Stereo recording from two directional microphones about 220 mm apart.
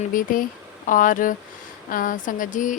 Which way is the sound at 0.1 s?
40° left (ahead or behind).